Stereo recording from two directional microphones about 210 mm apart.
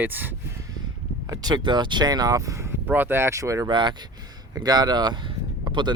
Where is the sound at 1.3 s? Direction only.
20° right (ahead or behind).